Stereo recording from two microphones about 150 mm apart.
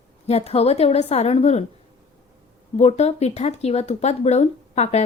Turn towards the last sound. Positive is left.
turn(degrees=45)  # may be behind; listen again after turning